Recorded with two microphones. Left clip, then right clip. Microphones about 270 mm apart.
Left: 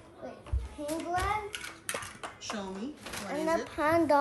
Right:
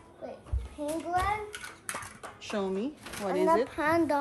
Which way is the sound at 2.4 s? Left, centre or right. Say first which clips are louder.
Right 8 dB; centre.